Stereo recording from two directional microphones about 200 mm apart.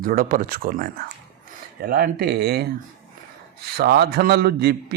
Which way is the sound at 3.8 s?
50° right (ahead or behind).